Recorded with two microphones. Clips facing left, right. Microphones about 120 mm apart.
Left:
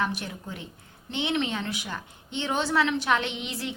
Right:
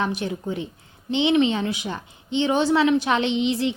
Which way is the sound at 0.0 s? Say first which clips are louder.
Right 5 dB; 20° right (ahead or behind).